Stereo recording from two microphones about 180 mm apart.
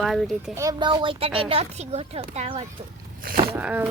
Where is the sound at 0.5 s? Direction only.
20° right (ahead or behind).